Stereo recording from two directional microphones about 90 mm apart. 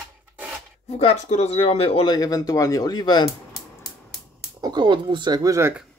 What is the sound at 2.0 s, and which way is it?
Speech, 40° left (ahead or behind).